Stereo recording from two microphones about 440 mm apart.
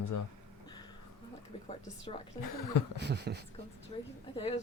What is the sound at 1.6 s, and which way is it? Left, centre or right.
Speech, centre.